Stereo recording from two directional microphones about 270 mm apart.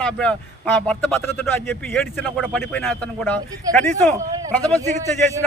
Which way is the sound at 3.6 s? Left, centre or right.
Centre.